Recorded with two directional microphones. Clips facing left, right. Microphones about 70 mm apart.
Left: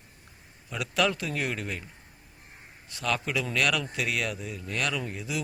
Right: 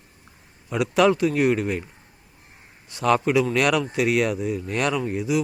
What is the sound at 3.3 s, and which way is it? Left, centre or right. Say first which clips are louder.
Speech: right 8 dB; centre.